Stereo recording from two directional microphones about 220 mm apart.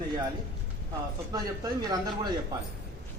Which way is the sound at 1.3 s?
20° right (ahead or behind).